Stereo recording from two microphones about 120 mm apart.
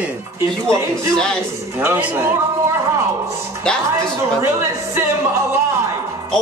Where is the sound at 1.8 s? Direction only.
15° right (ahead or behind).